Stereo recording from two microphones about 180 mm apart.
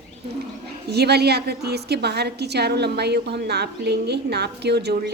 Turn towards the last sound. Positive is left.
turn(degrees=-65)  # may be behind; listen again after turning